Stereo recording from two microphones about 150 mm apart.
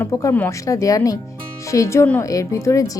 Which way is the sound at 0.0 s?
20° left (ahead or behind).